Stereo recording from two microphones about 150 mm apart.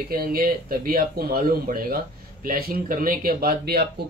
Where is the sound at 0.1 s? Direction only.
75° right (ahead or behind).